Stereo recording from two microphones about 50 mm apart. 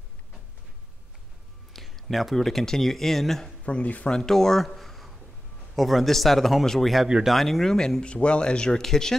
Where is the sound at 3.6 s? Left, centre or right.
Left.